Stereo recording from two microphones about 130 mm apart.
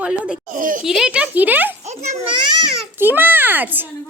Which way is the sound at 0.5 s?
90° right.